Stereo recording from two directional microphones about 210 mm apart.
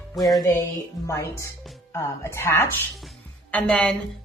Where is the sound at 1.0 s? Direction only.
15° left (ahead or behind).